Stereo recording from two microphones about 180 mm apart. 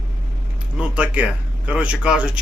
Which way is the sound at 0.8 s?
5° right (ahead or behind).